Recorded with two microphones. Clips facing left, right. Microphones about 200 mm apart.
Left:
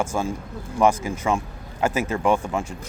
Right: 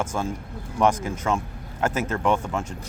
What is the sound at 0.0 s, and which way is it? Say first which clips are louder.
Speech: left 2 dB; 10° left (ahead or behind).